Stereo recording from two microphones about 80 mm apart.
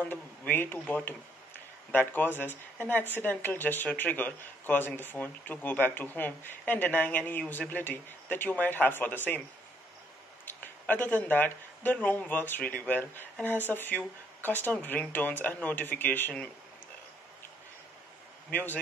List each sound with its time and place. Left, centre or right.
0.0 s a man's voice: left
10.4 s speech: left
18.5 s speech: left